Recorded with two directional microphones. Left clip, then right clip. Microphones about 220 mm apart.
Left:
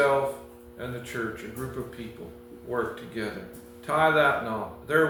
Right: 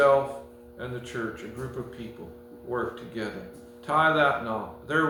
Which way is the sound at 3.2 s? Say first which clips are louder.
Left 1 dB; 15° right (ahead or behind).